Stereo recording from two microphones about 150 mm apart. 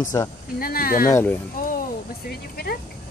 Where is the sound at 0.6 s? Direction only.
75° left (ahead or behind).